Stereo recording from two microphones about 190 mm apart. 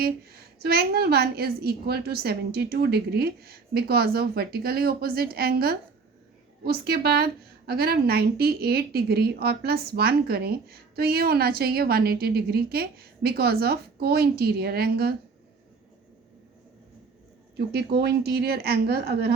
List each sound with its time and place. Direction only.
0.0 s a woman's voice: 55° right (ahead or behind)
17.6 s a woman's voice: 60° right (ahead or behind)